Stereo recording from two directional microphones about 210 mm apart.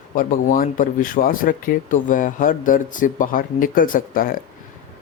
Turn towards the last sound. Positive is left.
turn(degrees=40)  # may be behind; listen again after turning